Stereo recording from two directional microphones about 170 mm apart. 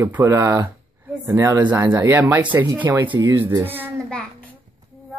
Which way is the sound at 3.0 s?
30° right (ahead or behind).